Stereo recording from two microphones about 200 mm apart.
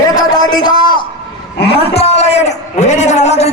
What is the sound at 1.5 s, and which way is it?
A man's voice, 30° left (ahead or behind).